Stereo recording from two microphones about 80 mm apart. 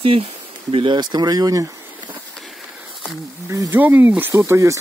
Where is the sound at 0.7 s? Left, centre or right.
Right.